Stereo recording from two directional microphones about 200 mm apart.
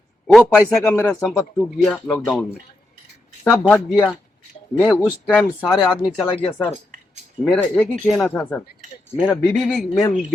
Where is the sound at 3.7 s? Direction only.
20° left (ahead or behind).